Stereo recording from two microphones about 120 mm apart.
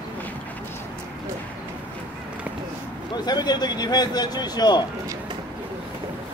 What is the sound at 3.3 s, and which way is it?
Speech, 35° left (ahead or behind).